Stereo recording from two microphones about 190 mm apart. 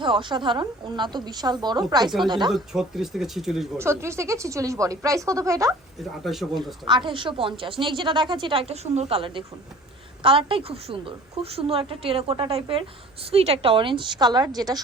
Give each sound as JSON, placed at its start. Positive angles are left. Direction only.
{"t": 0.0, "sound": "a woman's voice", "side_deg": -25}
{"t": 2.5, "sound": "speech", "side_deg": 0}
{"t": 3.8, "sound": "speech", "side_deg": -15}
{"t": 6.0, "sound": "speech", "side_deg": 0}
{"t": 6.8, "sound": "a woman's voice", "side_deg": -25}